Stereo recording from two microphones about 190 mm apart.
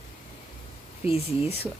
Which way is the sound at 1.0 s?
30° left (ahead or behind).